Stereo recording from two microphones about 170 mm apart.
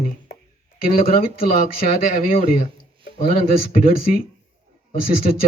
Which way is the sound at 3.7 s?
60° left (ahead or behind).